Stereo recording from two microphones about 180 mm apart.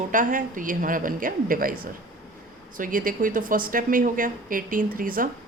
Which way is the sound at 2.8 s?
50° right (ahead or behind).